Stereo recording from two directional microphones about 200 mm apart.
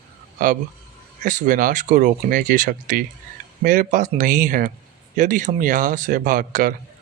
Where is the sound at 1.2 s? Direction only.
40° right (ahead or behind).